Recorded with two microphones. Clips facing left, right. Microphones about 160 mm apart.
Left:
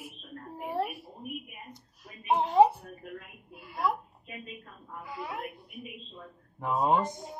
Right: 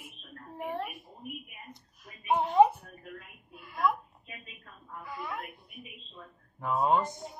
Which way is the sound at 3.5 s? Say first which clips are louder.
Right 1 dB; 35° left (ahead or behind).